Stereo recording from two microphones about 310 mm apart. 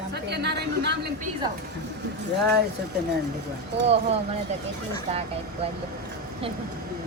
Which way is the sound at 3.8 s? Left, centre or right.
Centre.